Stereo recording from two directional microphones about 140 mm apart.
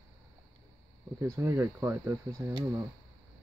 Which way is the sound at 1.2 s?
20° right (ahead or behind).